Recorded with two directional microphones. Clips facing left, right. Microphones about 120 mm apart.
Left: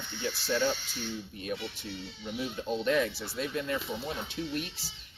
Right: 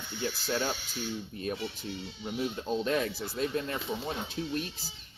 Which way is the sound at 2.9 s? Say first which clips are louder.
Left 2 dB; 40° right (ahead or behind).